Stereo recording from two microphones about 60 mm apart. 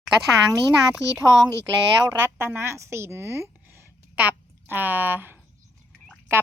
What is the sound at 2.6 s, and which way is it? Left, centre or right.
A woman's voice, right.